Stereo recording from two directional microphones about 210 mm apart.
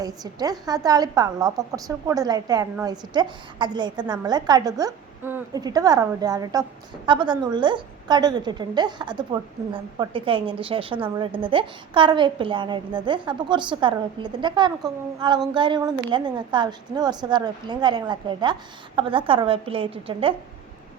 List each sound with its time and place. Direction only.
0.0 s a woman's voice: 15° right (ahead or behind)